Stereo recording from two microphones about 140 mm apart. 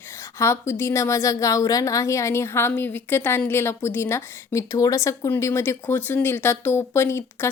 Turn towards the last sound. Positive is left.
turn(degrees=15)  # may be behind; listen again after turning